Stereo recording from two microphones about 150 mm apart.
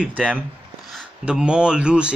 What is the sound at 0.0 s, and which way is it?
Speech, 5° right (ahead or behind).